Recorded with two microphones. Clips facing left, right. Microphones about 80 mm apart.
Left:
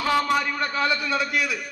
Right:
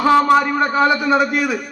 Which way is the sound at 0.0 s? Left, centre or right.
Right.